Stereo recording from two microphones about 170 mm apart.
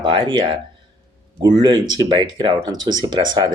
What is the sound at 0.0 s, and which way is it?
Speech, 30° right (ahead or behind).